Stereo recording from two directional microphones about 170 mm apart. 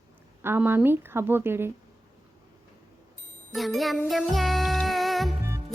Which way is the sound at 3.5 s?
Centre (ahead or behind).